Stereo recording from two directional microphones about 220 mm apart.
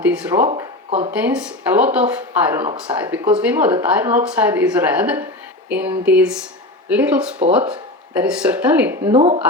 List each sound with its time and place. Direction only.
0.0 s speech: 5° right (ahead or behind)
0.4 s speech: 25° right (ahead or behind)
1.1 s speech: 5° right (ahead or behind)
9.1 s speech: 25° right (ahead or behind)